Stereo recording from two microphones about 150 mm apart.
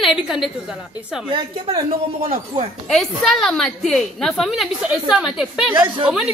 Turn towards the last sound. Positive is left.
turn(degrees=-5)  # may be behind; listen again after turning